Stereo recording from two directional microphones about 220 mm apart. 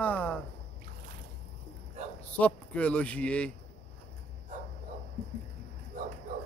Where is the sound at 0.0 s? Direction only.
5° left (ahead or behind).